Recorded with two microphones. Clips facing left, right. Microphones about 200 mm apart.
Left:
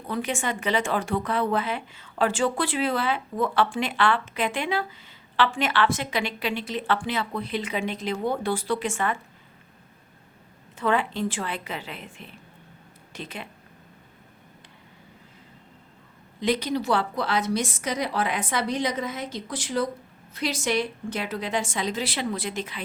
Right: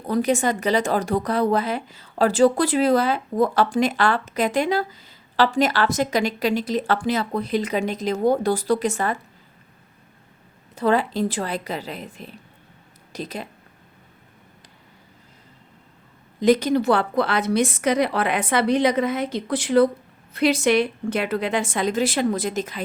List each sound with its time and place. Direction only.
0.1 s speech: 40° right (ahead or behind)
10.8 s speech: 40° right (ahead or behind)
16.4 s a woman's voice: 45° right (ahead or behind)